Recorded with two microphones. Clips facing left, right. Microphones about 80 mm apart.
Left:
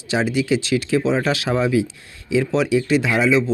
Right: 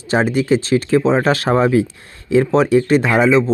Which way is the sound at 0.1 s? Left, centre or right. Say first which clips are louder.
Right 4 dB; right.